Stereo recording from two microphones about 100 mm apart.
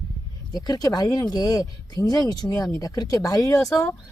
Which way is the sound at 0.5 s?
40° left (ahead or behind).